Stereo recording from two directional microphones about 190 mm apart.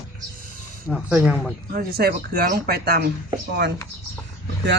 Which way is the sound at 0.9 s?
Centre (ahead or behind).